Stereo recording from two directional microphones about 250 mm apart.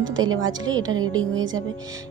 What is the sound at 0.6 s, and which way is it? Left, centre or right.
Speech, centre.